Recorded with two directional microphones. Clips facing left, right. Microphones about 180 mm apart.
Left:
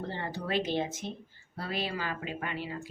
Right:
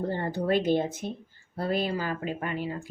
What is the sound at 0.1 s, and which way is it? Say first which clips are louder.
Speech: right 6 dB; 50° right (ahead or behind).